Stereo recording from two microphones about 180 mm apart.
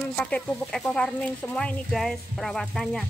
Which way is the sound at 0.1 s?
5° left (ahead or behind).